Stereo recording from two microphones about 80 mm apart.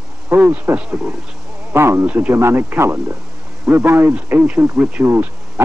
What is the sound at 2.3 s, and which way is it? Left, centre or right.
A man's voice, right.